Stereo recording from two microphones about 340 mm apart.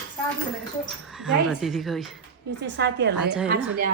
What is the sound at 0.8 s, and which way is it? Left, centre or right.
A woman's voice, centre.